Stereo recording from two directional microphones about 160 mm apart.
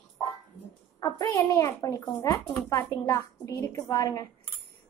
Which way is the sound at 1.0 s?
20° left (ahead or behind).